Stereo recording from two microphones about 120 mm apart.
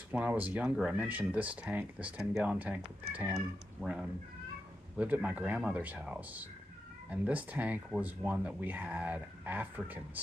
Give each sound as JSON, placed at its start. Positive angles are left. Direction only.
{"t": 0.1, "sound": "speech", "side_deg": -15}